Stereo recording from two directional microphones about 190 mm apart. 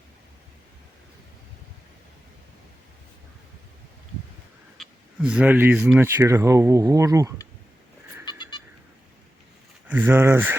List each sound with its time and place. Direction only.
4.8 s speech: 5° right (ahead or behind)
8.2 s goat: 25° left (ahead or behind)
9.8 s speech: 10° right (ahead or behind)